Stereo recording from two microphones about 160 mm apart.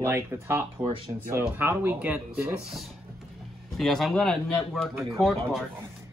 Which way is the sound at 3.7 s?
Centre (ahead or behind).